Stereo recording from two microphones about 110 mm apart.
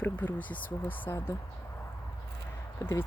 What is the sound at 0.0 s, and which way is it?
Speech, 15° left (ahead or behind).